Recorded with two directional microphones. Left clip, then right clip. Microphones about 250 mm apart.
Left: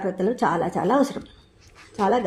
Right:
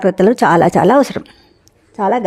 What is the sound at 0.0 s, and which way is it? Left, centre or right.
A woman's voice, right.